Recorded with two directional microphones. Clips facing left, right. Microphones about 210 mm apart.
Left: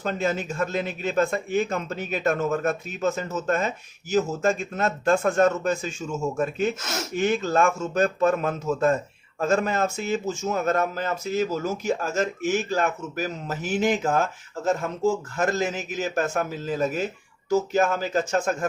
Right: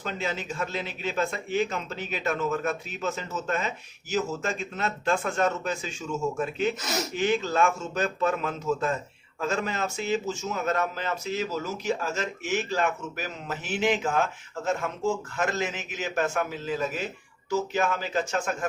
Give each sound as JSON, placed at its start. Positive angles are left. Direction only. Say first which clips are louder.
{"t": 0.0, "sound": "speech", "louder": "left 6 dB", "side_deg": 45}
{"t": 6.7, "sound": "speech", "louder": "right 1 dB", "side_deg": 0}
{"t": 7.2, "sound": "speech", "louder": "left 3 dB", "side_deg": 45}